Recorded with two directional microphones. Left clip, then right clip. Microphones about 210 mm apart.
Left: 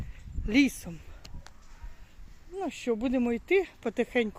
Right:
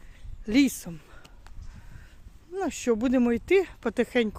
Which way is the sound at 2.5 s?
35° right (ahead or behind).